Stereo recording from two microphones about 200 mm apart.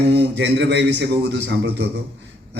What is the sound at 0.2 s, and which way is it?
A man's voice, 60° right (ahead or behind).